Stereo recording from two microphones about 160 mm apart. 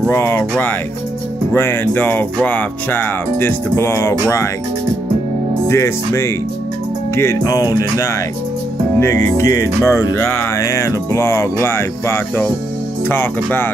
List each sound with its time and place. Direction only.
0.1 s speech: 15° left (ahead or behind)
5.7 s speech: 15° left (ahead or behind)
7.2 s music: 20° left (ahead or behind)
9.0 s speech: 15° left (ahead or behind)